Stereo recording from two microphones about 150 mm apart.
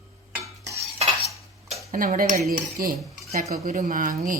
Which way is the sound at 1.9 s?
70° right (ahead or behind).